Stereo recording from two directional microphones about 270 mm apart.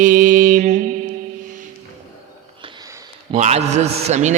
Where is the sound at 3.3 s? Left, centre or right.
Right.